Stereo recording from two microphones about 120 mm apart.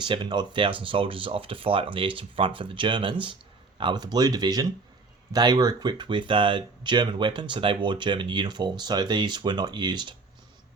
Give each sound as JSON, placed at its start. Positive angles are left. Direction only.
{"t": 0.0, "sound": "speech", "side_deg": -40}